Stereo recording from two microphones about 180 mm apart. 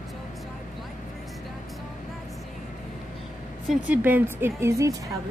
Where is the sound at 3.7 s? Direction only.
10° right (ahead or behind).